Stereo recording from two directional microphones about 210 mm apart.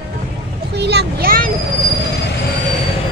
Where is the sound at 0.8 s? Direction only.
50° right (ahead or behind).